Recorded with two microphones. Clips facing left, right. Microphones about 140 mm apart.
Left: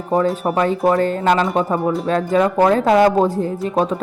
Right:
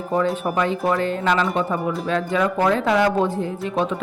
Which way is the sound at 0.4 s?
40° left (ahead or behind).